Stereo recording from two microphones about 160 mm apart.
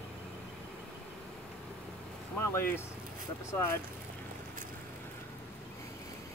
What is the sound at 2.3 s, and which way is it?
Vehicle, 15° left (ahead or behind).